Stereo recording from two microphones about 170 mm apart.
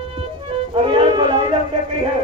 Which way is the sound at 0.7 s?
35° right (ahead or behind).